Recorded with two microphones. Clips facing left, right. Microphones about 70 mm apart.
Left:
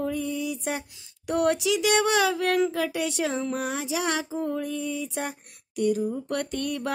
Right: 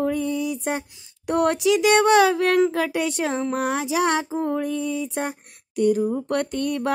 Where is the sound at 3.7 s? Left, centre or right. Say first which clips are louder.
Right 6 dB; right.